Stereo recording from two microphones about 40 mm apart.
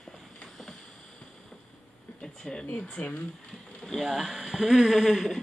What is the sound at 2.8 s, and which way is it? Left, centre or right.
Speech, left.